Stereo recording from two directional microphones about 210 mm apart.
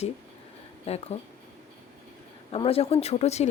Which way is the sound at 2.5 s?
25° left (ahead or behind).